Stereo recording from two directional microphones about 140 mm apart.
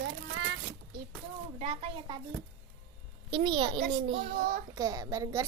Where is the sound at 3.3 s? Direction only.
40° right (ahead or behind).